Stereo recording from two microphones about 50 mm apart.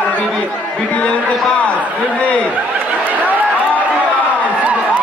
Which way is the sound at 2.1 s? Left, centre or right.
Left.